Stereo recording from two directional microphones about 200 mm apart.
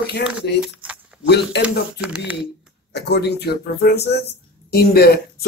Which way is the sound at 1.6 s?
5° right (ahead or behind).